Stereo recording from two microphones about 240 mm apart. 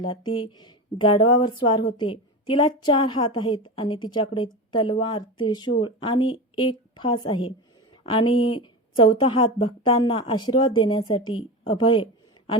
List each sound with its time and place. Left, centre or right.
0.3 s speech: left